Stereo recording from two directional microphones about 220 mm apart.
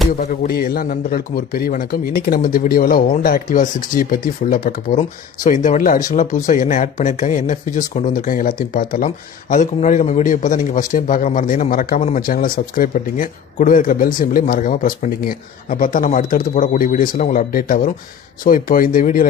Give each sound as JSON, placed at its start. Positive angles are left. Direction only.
{"t": 0.2, "sound": "speech", "side_deg": 35}